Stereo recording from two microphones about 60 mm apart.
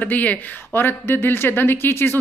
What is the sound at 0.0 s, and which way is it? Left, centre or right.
A woman's voice, left.